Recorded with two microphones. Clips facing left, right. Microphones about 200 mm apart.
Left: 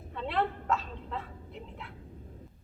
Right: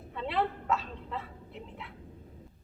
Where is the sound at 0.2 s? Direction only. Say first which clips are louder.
Even; centre (ahead or behind).